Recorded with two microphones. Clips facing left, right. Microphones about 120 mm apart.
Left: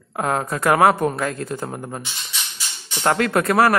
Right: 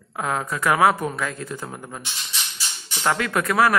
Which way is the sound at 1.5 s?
30° left (ahead or behind).